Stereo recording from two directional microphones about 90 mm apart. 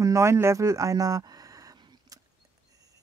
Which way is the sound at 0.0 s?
35° right (ahead or behind).